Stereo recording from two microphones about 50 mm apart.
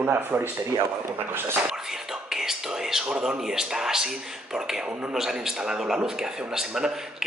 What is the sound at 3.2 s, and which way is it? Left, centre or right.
A man's voice, centre.